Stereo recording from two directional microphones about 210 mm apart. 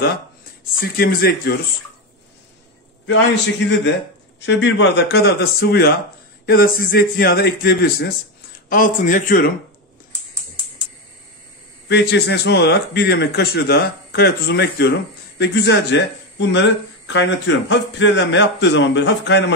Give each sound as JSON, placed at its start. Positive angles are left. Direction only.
{"t": 0.7, "sound": "a man's voice", "side_deg": 45}
{"t": 4.4, "sound": "a man's voice", "side_deg": 60}
{"t": 11.9, "sound": "a man's voice", "side_deg": 55}